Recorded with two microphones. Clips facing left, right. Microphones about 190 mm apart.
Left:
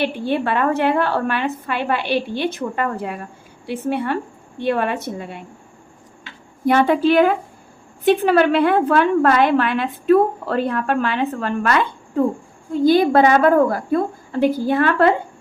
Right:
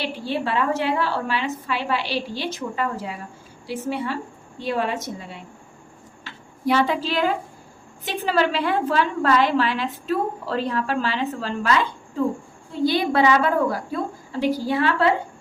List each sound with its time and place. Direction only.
0.0 s a woman's voice: 55° left (ahead or behind)
6.7 s a woman's voice: 55° left (ahead or behind)